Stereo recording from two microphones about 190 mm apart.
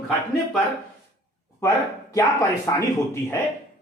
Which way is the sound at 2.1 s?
15° left (ahead or behind).